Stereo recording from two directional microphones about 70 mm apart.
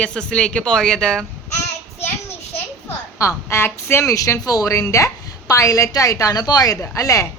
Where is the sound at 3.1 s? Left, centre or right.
Left.